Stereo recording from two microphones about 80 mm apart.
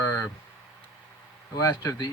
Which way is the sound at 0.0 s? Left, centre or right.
Left.